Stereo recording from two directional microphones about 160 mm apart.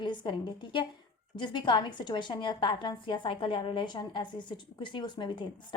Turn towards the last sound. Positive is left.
turn(degrees=30)  # may be behind; listen again after turning